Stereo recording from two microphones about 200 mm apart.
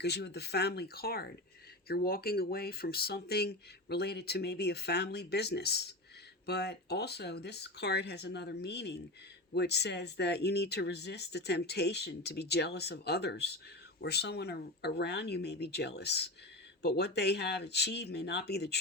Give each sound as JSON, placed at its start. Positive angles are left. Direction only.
{"t": 0.0, "sound": "speech", "side_deg": 55}